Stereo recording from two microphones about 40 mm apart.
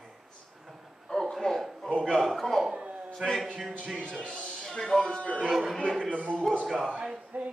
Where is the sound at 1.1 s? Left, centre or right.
Centre.